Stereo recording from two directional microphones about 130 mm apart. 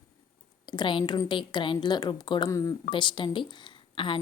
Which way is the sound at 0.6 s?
35° left (ahead or behind).